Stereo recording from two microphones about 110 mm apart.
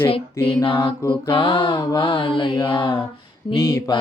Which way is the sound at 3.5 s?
30° left (ahead or behind).